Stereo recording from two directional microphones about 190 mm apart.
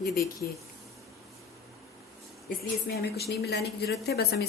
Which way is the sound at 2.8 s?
55° left (ahead or behind).